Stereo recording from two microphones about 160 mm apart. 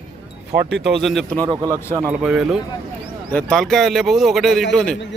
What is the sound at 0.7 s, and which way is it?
Speech, centre (ahead or behind).